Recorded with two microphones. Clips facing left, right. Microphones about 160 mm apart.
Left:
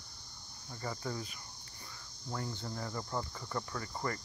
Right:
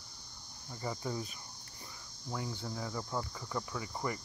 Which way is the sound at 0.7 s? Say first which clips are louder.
Right 1 dB; 15° right (ahead or behind).